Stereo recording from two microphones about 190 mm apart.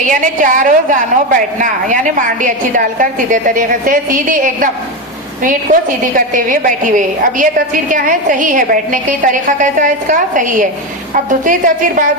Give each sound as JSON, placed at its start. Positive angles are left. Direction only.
{"t": 0.1, "sound": "a woman's voice", "side_deg": -45}
{"t": 6.0, "sound": "a woman's voice", "side_deg": -45}